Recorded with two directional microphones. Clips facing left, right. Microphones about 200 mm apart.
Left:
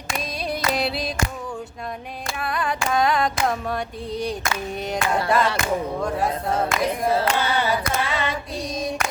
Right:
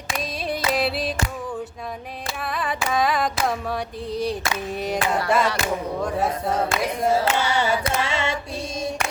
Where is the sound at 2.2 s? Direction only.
Centre (ahead or behind).